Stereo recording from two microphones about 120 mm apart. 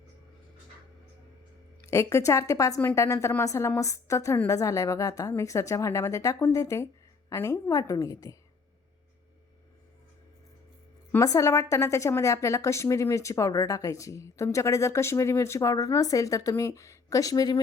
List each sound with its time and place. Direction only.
1.9 s a woman's voice: 25° left (ahead or behind)
11.2 s a woman's voice: 25° left (ahead or behind)